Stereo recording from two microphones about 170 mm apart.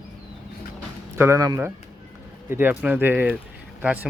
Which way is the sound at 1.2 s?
15° right (ahead or behind).